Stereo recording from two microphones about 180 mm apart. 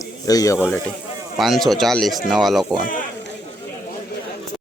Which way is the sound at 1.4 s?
Centre (ahead or behind).